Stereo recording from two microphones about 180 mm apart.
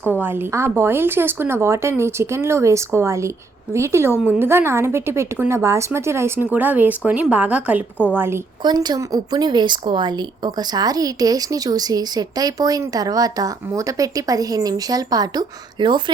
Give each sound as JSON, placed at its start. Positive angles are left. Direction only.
{"t": 0.0, "sound": "speech", "side_deg": -10}
{"t": 8.6, "sound": "speech", "side_deg": -25}